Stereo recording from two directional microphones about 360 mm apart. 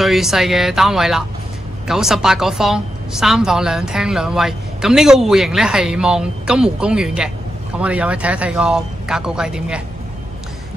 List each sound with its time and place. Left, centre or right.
0.0 s a woman's voice: centre